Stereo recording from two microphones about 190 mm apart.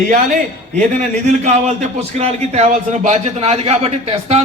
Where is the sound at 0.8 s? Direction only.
40° right (ahead or behind).